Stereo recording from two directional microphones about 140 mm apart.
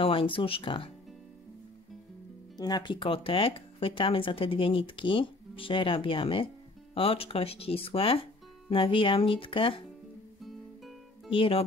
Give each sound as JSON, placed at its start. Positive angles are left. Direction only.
{"t": 0.0, "sound": "speech", "side_deg": 40}
{"t": 2.5, "sound": "speech", "side_deg": 30}
{"t": 11.2, "sound": "speech", "side_deg": 40}